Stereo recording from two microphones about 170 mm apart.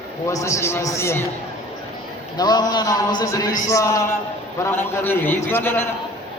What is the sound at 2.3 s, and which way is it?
A man's voice, 25° left (ahead or behind).